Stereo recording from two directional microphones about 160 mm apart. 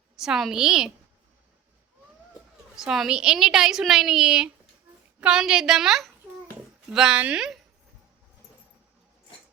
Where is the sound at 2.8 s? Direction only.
5° right (ahead or behind).